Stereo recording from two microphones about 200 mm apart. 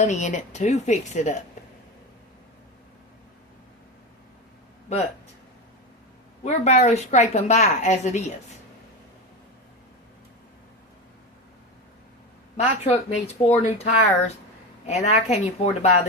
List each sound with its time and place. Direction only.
0.0 s a woman's voice: 35° left (ahead or behind)
6.4 s a woman's voice: 35° left (ahead or behind)
12.5 s a woman's voice: 35° left (ahead or behind)